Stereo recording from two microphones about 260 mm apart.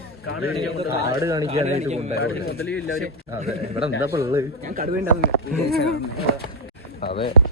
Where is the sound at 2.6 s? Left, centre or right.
Centre.